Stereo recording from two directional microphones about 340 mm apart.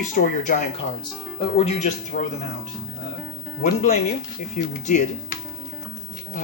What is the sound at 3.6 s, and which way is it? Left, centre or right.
Speech, centre.